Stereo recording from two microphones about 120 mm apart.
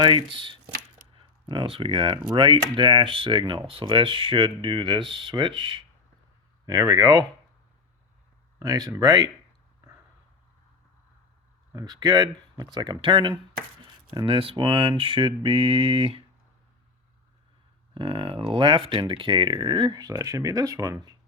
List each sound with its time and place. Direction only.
0.0 s speech: 40° right (ahead or behind)
6.7 s speech: 30° right (ahead or behind)
8.5 s speech: 30° right (ahead or behind)
11.7 s speech: 30° right (ahead or behind)
17.9 s speech: 50° right (ahead or behind); by 21.2 s 30° right (ahead or behind)